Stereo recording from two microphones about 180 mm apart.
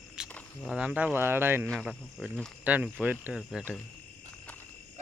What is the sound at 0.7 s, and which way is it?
Speech, 5° right (ahead or behind).